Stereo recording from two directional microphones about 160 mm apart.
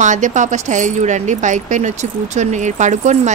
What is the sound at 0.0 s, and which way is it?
Speech, 50° right (ahead or behind).